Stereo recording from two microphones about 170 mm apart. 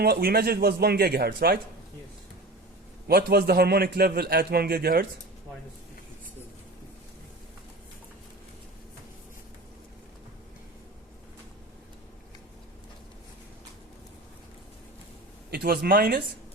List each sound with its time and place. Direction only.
0.0 s a man's voice: 65° right (ahead or behind)
3.1 s a man's voice: 70° right (ahead or behind)
15.4 s speech: 65° right (ahead or behind)